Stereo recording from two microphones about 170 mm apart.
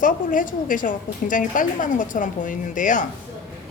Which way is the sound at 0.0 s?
50° left (ahead or behind).